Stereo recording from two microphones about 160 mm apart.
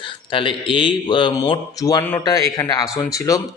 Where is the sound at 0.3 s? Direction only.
30° left (ahead or behind).